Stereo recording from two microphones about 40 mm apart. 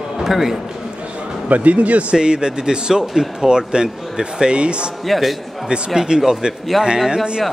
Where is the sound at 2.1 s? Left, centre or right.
Right.